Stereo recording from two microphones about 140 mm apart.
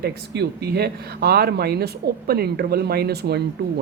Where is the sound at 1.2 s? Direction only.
90° right.